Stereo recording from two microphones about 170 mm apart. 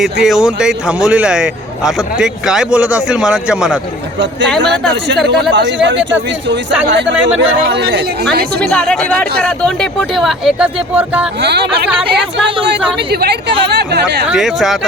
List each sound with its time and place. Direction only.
0.0 s a man's voice: centre (ahead or behind)
5.5 s speech: 90° right; by 8.7 s 70° right (ahead or behind)
8.7 s a man's voice: 5° left (ahead or behind)
11.4 s speech: 75° right (ahead or behind)
13.1 s speech: 70° right (ahead or behind)
14.3 s a man's voice: centre (ahead or behind)